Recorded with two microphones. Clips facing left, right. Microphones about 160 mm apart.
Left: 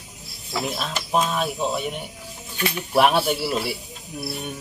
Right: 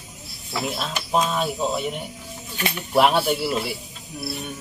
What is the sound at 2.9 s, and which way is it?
Speech, 5° left (ahead or behind).